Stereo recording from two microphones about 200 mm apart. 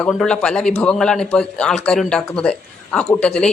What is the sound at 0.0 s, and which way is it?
A man's voice, centre (ahead or behind).